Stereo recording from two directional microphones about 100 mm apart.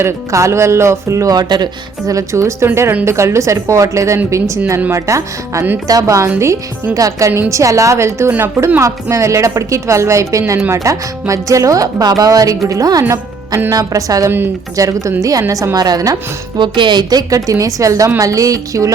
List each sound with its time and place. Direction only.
0.0 s a woman's voice: 30° right (ahead or behind)
14.3 s a woman's voice: 20° right (ahead or behind)
14.8 s speech: 35° right (ahead or behind)
16.6 s speech: 50° right (ahead or behind); by 18.9 s 35° right (ahead or behind)